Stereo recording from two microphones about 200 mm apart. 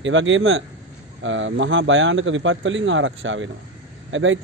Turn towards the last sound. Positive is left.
turn(degrees=-70)  # may be behind; listen again after turning